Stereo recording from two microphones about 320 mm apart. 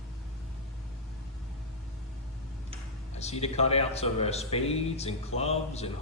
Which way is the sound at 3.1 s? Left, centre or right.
Centre.